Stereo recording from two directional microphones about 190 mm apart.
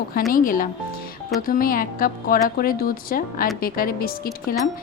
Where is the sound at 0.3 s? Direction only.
45° left (ahead or behind).